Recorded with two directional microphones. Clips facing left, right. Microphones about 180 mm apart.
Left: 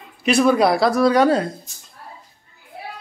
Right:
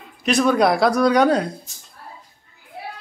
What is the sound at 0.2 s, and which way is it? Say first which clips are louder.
A woman's voice: left 1 dB; 5° left (ahead or behind).